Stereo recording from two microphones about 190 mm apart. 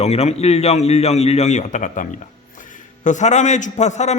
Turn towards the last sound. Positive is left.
turn(degrees=35)  # may be behind; listen again after turning